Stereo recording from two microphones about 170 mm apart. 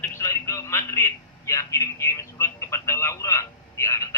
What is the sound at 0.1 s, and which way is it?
A man's voice, 20° left (ahead or behind).